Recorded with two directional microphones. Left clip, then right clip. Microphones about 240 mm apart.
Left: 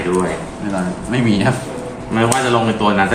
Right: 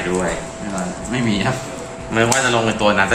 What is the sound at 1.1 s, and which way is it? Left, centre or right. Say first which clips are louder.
Speech: left 4 dB; left.